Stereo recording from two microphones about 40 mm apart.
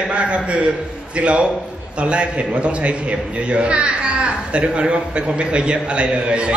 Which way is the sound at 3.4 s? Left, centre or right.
Right.